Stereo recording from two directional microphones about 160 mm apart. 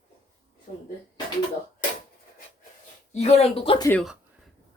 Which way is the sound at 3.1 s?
40° left (ahead or behind).